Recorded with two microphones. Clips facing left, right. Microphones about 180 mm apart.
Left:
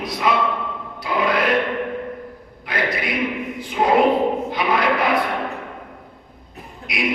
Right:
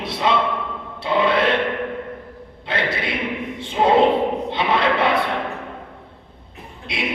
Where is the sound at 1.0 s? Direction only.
25° right (ahead or behind).